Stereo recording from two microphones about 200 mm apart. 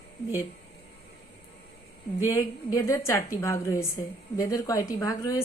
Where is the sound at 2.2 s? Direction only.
15° left (ahead or behind).